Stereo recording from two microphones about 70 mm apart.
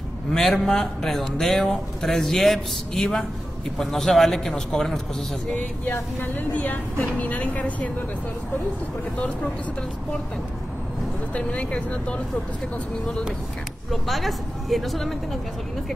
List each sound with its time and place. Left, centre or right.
0.3 s a man's voice: centre
6.2 s speech: left
11.3 s speech: centre
13.8 s a man's voice: centre